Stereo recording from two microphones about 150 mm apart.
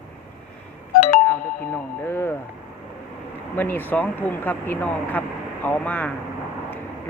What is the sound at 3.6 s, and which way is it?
Speech, 15° left (ahead or behind).